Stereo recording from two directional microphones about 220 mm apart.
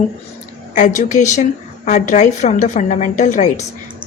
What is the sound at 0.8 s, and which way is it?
A woman's voice, 35° left (ahead or behind).